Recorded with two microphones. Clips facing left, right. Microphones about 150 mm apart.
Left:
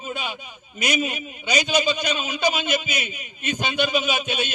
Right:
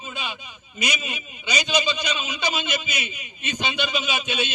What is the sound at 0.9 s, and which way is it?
A man's voice, 50° left (ahead or behind).